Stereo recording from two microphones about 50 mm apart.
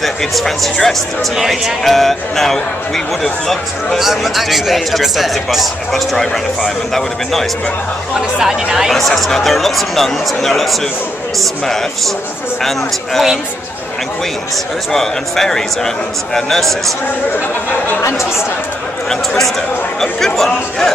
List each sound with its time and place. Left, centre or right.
0.0 s speech: centre
8.4 s speech: centre
8.9 s speech: centre
14.9 s a man's voice: centre
18.0 s speech: left
19.0 s a man's voice: centre